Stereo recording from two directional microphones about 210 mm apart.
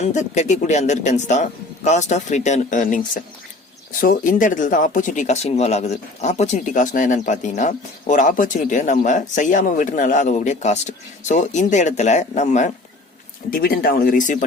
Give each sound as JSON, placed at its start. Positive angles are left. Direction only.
{"t": 0.0, "sound": "speech", "side_deg": 35}
{"t": 13.5, "sound": "speech", "side_deg": 45}